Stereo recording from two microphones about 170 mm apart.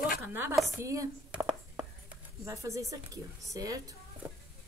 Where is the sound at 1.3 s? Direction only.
5° right (ahead or behind).